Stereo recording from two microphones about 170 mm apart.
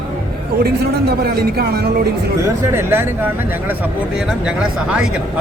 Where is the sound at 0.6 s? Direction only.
65° right (ahead or behind).